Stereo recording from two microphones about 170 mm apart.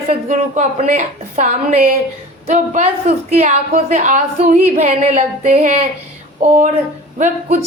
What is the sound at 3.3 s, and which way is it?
A woman's voice, 45° right (ahead or behind).